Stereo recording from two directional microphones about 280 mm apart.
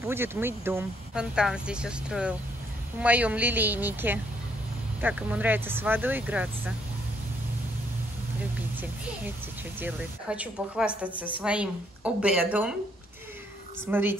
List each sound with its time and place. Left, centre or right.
0.0 s speech: centre
8.5 s speech: centre
13.8 s speech: centre